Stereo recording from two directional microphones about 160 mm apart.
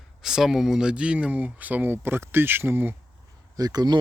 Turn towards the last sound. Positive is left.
turn(degrees=-25)  # may be behind; listen again after turning